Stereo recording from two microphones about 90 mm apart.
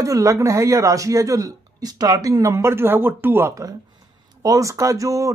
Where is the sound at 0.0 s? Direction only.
35° right (ahead or behind).